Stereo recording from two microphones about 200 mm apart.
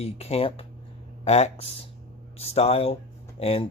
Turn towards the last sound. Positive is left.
turn(degrees=30)  # may be behind; listen again after turning